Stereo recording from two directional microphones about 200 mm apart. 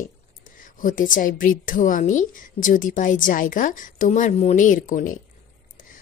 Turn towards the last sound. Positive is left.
turn(degrees=40)  # may be behind; listen again after turning